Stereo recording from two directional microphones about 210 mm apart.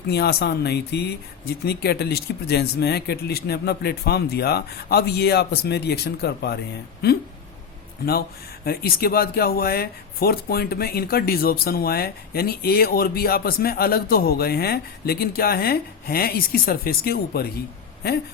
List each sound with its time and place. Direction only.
0.1 s speech: 50° left (ahead or behind)
8.6 s speech: 45° left (ahead or behind)